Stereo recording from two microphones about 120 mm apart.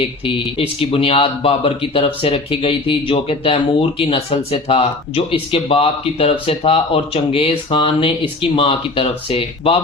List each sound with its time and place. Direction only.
0.0 s speech: 50° left (ahead or behind)